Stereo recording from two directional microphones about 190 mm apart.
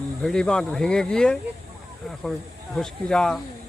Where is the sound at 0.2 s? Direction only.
5° left (ahead or behind).